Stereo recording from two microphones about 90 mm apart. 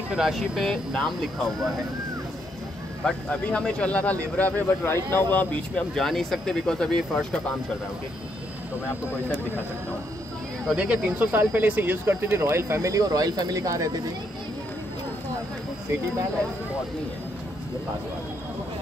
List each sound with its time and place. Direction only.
0.1 s speech: 5° right (ahead or behind)
3.1 s speech: 10° left (ahead or behind)
5.9 s speech: centre (ahead or behind)
10.7 s speech: 10° right (ahead or behind); by 14.0 s 40° right (ahead or behind)